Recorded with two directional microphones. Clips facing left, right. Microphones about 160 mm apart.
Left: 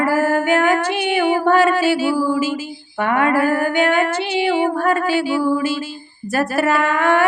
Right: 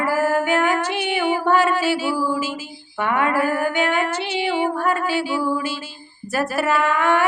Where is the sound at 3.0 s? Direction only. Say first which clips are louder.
Left 3 dB; 50° left (ahead or behind).